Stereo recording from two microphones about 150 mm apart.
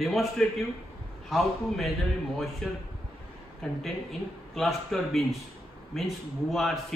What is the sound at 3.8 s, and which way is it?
A man's voice, centre (ahead or behind).